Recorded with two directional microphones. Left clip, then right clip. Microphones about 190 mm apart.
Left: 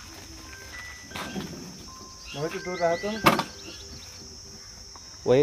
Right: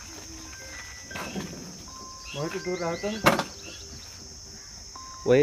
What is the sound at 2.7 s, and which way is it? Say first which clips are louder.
Speech: left 6 dB; 25° right (ahead or behind).